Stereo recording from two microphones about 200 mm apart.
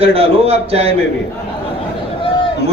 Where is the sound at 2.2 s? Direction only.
25° left (ahead or behind).